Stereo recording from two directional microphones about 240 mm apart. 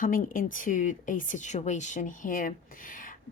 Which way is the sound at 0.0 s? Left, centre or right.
Left.